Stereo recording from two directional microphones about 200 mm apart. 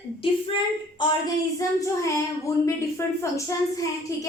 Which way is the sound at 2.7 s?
15° left (ahead or behind).